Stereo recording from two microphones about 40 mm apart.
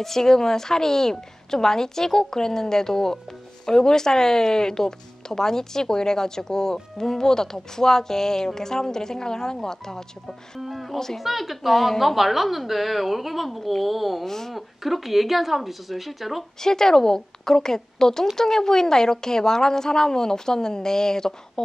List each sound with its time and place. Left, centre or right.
0.0 s speech: centre
10.6 s a woman's voice: centre
14.2 s speech: centre
14.5 s a woman's voice: centre
16.6 s speech: centre